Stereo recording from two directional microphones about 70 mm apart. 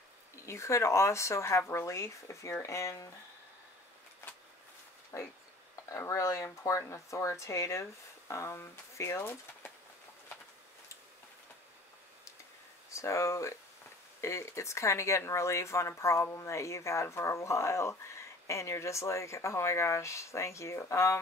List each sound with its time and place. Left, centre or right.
0.5 s speech: left
5.1 s speech: left
12.9 s speech: left